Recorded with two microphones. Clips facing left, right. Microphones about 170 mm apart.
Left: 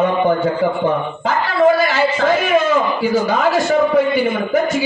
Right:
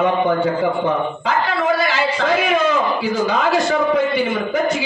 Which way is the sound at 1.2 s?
45° left (ahead or behind).